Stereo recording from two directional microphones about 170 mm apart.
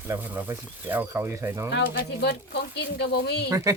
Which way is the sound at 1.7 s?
80° left.